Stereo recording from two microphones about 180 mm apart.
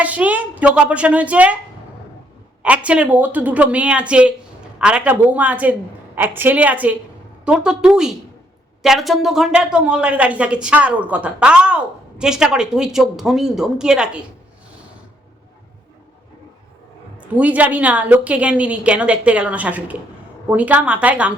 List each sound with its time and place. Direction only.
0.0 s a woman's voice: 10° right (ahead or behind)
2.6 s a woman's voice: 5° right (ahead or behind)
17.2 s a woman's voice: 10° right (ahead or behind)